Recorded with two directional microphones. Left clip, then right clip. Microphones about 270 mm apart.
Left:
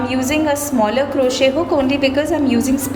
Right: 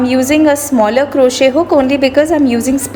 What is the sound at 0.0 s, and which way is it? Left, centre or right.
A woman's voice, centre.